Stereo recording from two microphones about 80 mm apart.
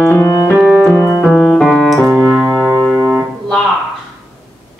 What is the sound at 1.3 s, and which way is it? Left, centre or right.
Piano, centre.